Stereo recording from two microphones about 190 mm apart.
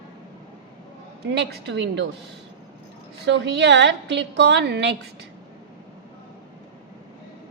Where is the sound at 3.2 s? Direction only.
70° right (ahead or behind).